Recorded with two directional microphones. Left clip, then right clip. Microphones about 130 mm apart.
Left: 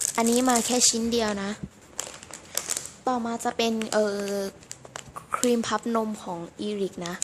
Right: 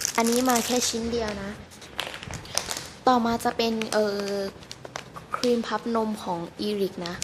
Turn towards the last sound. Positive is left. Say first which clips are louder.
# right 2 dB
turn(degrees=20)  # may be behind; listen again after turning